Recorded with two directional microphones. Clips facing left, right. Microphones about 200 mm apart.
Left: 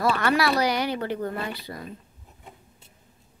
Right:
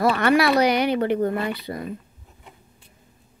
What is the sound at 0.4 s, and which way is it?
Speech, 20° right (ahead or behind).